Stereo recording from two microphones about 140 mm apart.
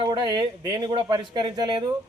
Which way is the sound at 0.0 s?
35° right (ahead or behind).